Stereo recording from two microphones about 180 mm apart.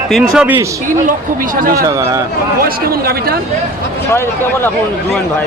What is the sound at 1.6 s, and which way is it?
Speech, 50° right (ahead or behind).